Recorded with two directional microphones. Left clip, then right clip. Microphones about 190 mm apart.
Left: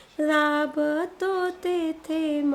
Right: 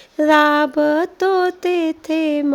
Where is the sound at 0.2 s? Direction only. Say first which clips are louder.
Right 9 dB; 40° right (ahead or behind).